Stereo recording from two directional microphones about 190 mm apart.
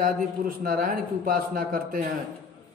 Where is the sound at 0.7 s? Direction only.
50° right (ahead or behind).